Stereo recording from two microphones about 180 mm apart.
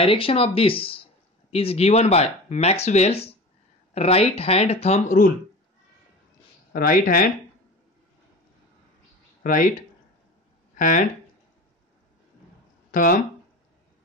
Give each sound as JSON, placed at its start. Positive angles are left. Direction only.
{"t": 0.0, "sound": "speech", "side_deg": 30}
{"t": 6.7, "sound": "speech", "side_deg": 50}
{"t": 9.4, "sound": "speech", "side_deg": 45}
{"t": 12.9, "sound": "speech", "side_deg": 50}